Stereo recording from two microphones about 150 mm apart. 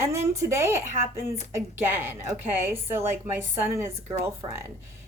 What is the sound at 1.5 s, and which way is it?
A woman's voice, 15° right (ahead or behind).